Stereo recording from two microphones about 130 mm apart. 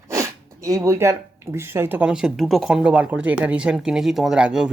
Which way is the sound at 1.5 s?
20° right (ahead or behind).